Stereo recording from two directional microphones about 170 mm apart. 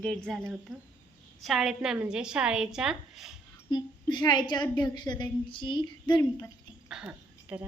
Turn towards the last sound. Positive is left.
turn(degrees=-5)  # may be behind; listen again after turning